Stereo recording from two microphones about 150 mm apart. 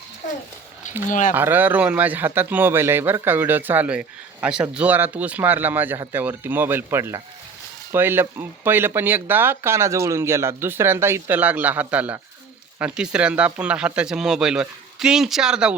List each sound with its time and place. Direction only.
1.0 s speech: 60° left (ahead or behind)
1.3 s a man's voice: 10° right (ahead or behind)